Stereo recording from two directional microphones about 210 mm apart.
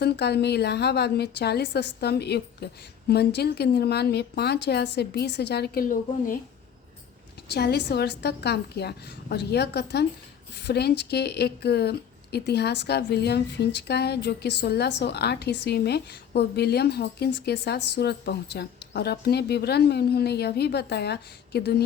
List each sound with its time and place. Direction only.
0.0 s speech: 50° left (ahead or behind)
7.5 s speech: 50° left (ahead or behind)